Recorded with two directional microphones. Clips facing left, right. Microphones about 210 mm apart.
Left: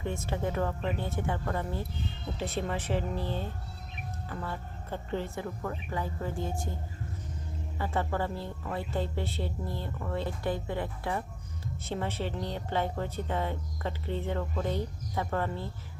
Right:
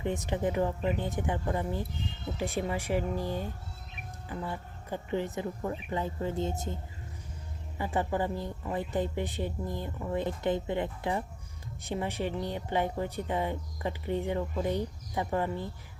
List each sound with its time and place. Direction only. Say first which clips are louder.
0.0 s a woman's voice: right 2 dB; 15° right (ahead or behind)
7.8 s a woman's voice: right 1 dB; 15° right (ahead or behind)